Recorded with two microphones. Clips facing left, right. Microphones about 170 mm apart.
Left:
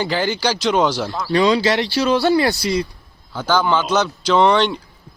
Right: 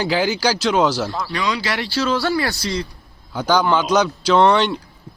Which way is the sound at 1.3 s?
30° left (ahead or behind).